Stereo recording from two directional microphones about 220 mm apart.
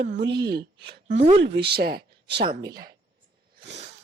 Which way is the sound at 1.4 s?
50° right (ahead or behind).